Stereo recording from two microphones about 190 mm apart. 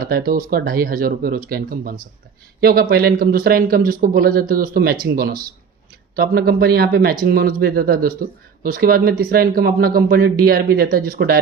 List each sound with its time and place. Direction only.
0.0 s speech: 50° right (ahead or behind)